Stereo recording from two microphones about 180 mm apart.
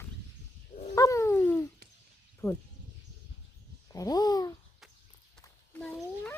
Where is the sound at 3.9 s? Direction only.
20° left (ahead or behind).